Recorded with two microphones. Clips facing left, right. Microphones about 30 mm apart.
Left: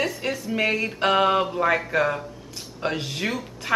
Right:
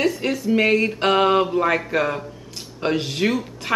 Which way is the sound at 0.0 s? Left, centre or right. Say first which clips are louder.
Right 5 dB; centre.